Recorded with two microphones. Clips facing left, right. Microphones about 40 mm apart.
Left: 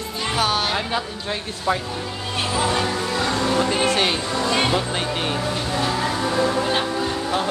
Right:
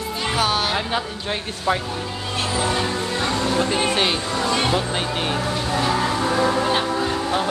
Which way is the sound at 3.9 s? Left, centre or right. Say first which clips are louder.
Even; centre.